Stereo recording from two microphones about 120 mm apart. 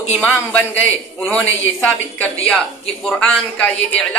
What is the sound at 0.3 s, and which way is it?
Speech, 10° left (ahead or behind).